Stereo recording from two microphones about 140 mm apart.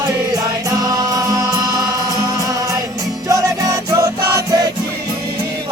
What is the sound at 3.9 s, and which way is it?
Music, 20° right (ahead or behind).